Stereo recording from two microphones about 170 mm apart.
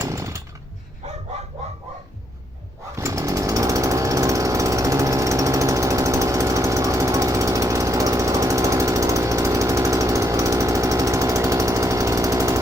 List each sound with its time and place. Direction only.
0.0 s jackhammer: 20° right (ahead or behind)
2.9 s chainsaw: 20° right (ahead or behind)